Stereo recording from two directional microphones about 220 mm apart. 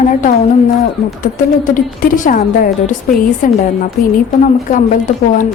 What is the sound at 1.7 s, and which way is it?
A woman's voice, 35° left (ahead or behind).